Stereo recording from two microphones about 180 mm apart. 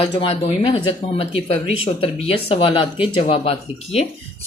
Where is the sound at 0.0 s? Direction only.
30° left (ahead or behind).